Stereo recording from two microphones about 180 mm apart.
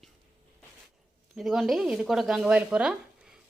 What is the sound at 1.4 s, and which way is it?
A woman's voice, centre (ahead or behind).